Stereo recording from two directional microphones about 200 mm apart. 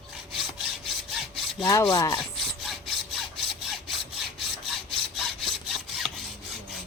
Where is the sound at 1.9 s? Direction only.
20° left (ahead or behind).